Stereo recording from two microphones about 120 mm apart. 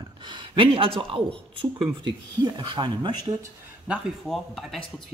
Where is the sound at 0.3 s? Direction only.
45° right (ahead or behind).